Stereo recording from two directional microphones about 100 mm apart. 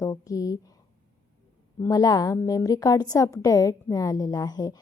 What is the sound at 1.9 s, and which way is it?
A woman's voice, 40° left (ahead or behind).